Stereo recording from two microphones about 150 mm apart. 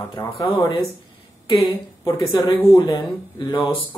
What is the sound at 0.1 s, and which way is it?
Speech, 30° left (ahead or behind).